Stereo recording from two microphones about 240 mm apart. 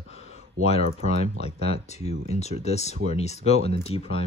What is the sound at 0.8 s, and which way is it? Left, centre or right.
Speech, right.